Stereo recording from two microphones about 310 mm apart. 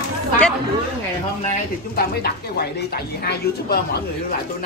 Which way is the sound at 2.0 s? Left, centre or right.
Left.